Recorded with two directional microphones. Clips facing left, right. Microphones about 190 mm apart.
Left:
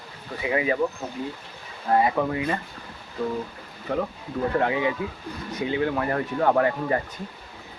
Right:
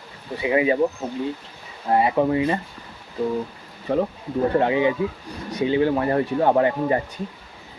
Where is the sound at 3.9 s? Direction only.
25° right (ahead or behind).